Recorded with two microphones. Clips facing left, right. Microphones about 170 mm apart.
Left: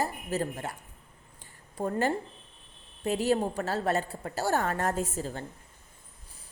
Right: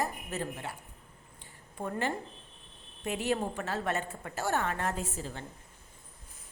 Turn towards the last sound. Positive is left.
turn(degrees=40)  # may be behind; listen again after turning